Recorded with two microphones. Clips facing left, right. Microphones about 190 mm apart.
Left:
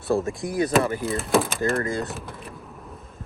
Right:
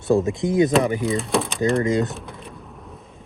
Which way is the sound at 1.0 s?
Centre (ahead or behind).